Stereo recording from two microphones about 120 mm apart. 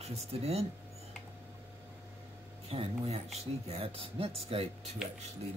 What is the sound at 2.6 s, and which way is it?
A man's voice, 60° right (ahead or behind).